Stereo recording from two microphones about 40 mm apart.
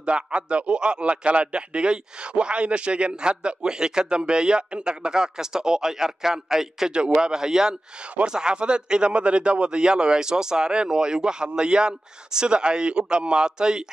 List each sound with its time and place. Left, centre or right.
0.0 s a man's voice: right; by 6.9 s centre
6.9 s a man's voice: right